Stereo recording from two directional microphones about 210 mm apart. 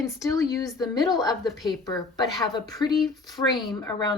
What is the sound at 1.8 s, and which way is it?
Speech, 20° left (ahead or behind).